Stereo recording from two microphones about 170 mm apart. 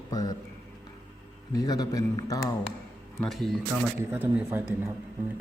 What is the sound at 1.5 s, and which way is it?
A man's voice, 20° left (ahead or behind).